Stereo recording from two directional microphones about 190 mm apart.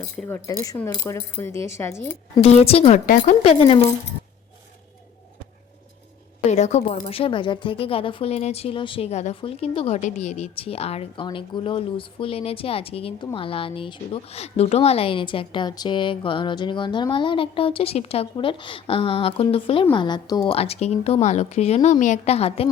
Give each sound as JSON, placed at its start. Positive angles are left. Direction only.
{"t": 0.2, "sound": "speech", "side_deg": 10}
{"t": 2.4, "sound": "a woman's voice", "side_deg": 30}
{"t": 3.1, "sound": "a woman's voice", "side_deg": 45}
{"t": 3.4, "sound": "a woman's voice", "side_deg": 30}
{"t": 6.5, "sound": "a woman's voice", "side_deg": 35}
{"t": 7.1, "sound": "speech", "side_deg": 30}
{"t": 20.6, "sound": "a woman's voice", "side_deg": 35}